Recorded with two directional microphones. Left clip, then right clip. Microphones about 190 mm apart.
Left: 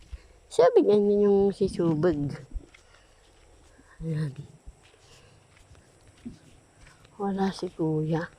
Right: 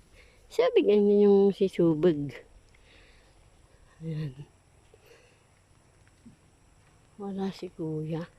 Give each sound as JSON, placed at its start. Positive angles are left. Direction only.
{"t": 0.5, "sound": "speech", "side_deg": -10}
{"t": 1.2, "sound": "speech", "side_deg": -20}
{"t": 4.0, "sound": "speech", "side_deg": 0}
{"t": 7.2, "sound": "speech", "side_deg": 0}